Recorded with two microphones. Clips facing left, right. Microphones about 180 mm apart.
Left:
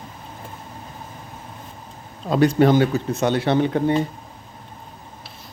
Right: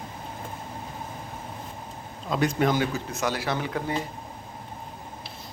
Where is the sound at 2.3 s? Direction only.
35° left (ahead or behind).